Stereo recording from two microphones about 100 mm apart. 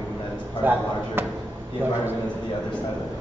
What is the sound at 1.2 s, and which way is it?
Speech, 20° right (ahead or behind).